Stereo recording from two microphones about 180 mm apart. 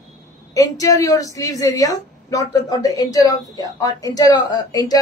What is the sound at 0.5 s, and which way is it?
Speech, 20° left (ahead or behind).